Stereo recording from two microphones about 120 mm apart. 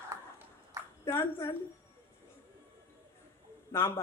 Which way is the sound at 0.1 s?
25° right (ahead or behind).